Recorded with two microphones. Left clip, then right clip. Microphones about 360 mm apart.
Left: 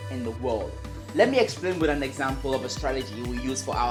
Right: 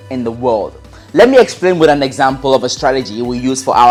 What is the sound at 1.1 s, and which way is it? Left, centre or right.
Speech, right.